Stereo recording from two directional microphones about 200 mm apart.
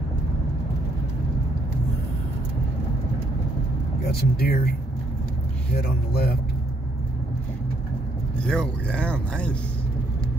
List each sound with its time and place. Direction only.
4.1 s speech: 50° left (ahead or behind)
5.8 s speech: 50° left (ahead or behind)
8.5 s speech: 5° left (ahead or behind)